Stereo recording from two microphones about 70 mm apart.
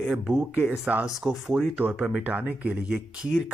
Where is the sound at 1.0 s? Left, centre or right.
Centre.